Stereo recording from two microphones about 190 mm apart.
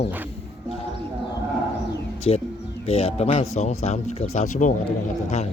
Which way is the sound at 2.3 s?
30° left (ahead or behind).